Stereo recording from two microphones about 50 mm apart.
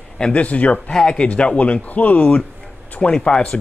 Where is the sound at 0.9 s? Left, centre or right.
Centre.